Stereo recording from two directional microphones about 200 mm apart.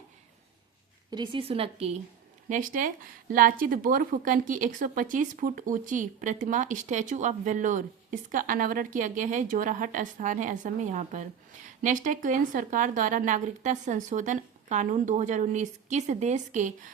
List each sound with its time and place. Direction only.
1.1 s speech: 25° right (ahead or behind)
2.5 s a woman's voice: 40° right (ahead or behind)